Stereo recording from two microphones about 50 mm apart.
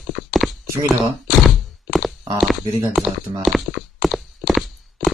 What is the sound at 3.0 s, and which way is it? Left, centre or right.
Speech, centre.